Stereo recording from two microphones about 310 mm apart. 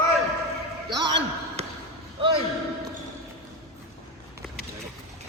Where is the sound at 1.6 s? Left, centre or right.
Right.